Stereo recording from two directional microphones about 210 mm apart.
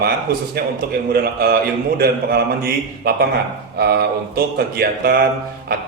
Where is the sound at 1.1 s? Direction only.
45° right (ahead or behind).